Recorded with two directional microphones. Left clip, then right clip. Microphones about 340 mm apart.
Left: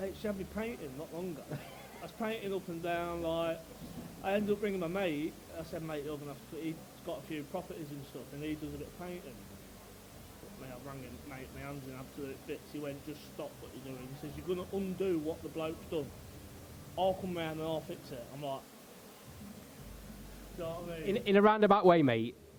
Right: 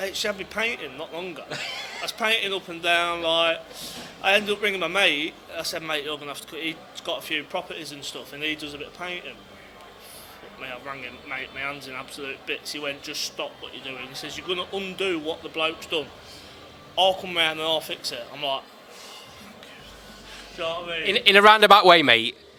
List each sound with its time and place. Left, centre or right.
0.0 s speech: centre
0.9 s a man's voice: right
1.5 s a man's voice: centre
9.0 s speech: centre
10.6 s speech: centre
16.9 s a man's voice: right
17.3 s a man's voice: centre
20.6 s a man's voice: centre